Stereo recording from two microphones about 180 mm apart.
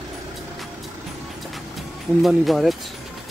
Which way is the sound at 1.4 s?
Centre (ahead or behind).